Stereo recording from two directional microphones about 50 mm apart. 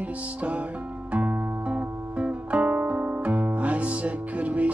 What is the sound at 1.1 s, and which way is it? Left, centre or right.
Music, right.